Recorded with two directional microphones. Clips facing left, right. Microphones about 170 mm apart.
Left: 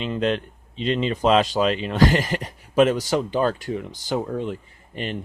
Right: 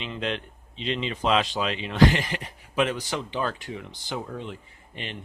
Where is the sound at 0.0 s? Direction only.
45° left (ahead or behind).